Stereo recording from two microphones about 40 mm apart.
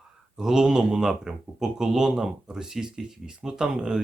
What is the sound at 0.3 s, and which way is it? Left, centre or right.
Speech, centre.